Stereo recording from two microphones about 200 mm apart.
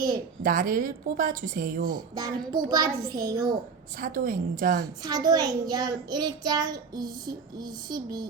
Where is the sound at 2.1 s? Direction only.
20° right (ahead or behind).